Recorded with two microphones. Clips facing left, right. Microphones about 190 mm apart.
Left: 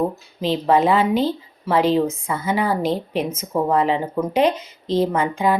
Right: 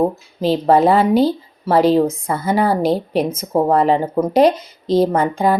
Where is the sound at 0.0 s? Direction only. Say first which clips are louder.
Right 5 dB; 40° right (ahead or behind).